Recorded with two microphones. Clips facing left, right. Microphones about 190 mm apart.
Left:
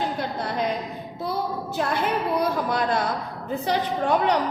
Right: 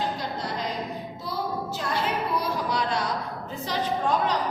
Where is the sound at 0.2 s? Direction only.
55° left (ahead or behind).